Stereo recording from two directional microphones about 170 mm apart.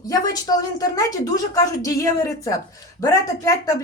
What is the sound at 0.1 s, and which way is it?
Speech, 20° left (ahead or behind).